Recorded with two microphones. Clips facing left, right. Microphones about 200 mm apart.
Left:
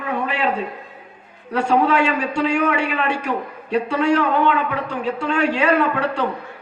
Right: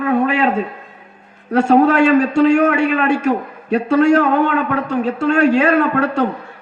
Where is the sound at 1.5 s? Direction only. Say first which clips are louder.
Right 6 dB; 45° right (ahead or behind).